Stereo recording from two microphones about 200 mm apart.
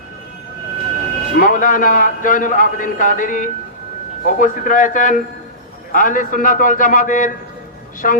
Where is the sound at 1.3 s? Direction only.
40° left (ahead or behind).